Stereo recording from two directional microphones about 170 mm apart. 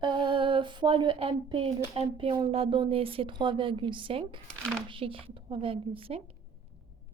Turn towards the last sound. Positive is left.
turn(degrees=-35)  # may be behind; listen again after turning